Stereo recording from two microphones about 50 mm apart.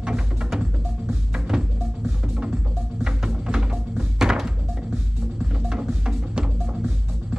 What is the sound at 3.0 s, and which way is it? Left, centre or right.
Music, centre.